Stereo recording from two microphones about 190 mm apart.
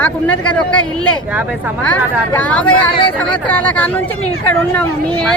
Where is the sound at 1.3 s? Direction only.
10° right (ahead or behind).